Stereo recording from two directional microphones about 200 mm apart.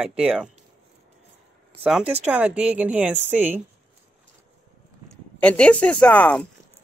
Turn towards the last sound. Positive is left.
turn(degrees=5)  # may be behind; listen again after turning